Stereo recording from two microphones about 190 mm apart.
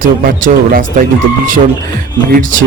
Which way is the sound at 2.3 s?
45° right (ahead or behind).